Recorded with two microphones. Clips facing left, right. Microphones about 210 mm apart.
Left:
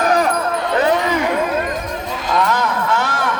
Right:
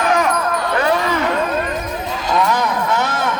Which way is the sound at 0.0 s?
35° left (ahead or behind).